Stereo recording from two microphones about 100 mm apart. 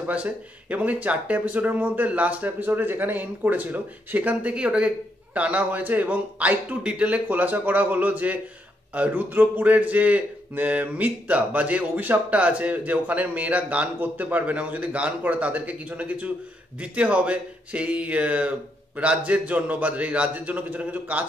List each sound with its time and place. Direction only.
0.0 s speech: 15° right (ahead or behind)